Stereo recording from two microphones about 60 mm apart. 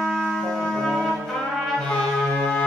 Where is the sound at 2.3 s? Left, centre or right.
Centre.